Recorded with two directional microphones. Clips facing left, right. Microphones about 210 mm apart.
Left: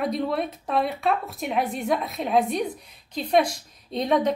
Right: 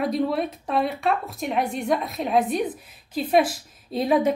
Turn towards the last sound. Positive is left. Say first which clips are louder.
# right 2 dB
turn(degrees=-5)  # may be behind; listen again after turning